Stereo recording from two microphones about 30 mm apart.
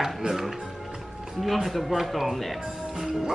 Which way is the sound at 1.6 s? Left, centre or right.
Centre.